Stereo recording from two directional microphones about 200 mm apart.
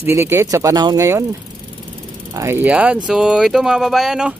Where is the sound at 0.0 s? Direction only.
10° right (ahead or behind).